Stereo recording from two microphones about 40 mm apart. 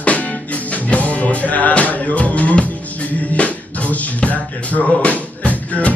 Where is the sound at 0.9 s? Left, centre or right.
Left.